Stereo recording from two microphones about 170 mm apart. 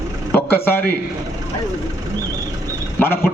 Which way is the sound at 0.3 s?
10° left (ahead or behind).